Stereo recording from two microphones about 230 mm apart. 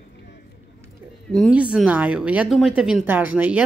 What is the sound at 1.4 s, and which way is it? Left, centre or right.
Speech, centre.